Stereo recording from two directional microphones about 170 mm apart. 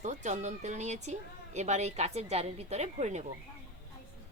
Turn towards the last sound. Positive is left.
turn(degrees=-40)  # may be behind; listen again after turning